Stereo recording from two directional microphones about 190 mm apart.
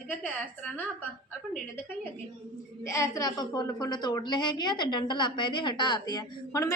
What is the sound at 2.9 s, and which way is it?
A woman's voice, 20° left (ahead or behind).